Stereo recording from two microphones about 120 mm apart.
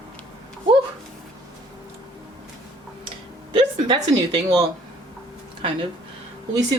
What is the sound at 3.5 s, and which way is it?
A woman's voice, 45° right (ahead or behind).